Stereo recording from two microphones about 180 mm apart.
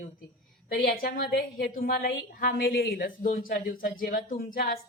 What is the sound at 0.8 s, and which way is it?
A woman's voice, 55° left (ahead or behind).